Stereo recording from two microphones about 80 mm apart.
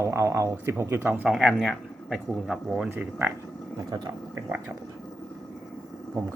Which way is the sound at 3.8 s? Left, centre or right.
Right.